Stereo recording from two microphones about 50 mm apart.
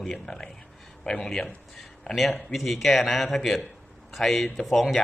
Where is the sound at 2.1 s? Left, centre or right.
Centre.